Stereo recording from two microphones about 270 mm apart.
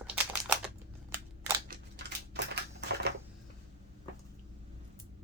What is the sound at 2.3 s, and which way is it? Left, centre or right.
Typewriter, right.